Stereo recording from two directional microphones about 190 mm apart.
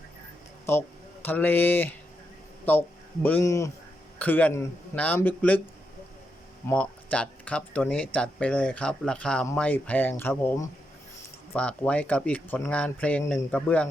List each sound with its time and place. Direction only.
0.6 s speech: 10° left (ahead or behind)
6.7 s speech: 5° left (ahead or behind)